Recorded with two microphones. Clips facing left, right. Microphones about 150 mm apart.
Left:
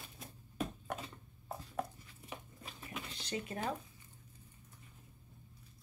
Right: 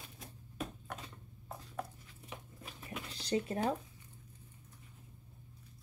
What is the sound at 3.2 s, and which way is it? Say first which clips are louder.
Speech: right 8 dB; 35° right (ahead or behind).